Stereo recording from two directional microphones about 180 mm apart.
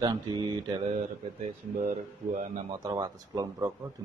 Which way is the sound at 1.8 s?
45° right (ahead or behind).